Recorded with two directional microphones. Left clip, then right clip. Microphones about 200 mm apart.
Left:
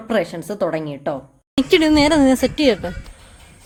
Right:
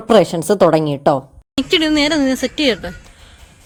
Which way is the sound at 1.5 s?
15° left (ahead or behind).